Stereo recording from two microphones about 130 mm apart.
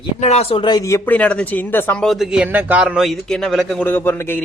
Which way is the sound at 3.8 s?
15° left (ahead or behind).